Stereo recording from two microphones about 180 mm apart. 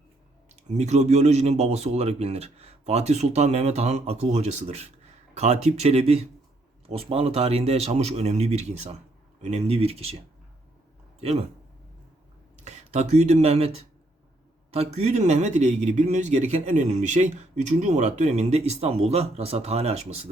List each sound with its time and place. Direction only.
0.7 s a man's voice: 40° right (ahead or behind)
12.6 s a man's voice: 40° right (ahead or behind)